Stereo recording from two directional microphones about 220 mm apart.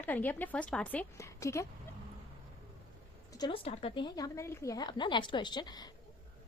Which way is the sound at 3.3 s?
20° left (ahead or behind).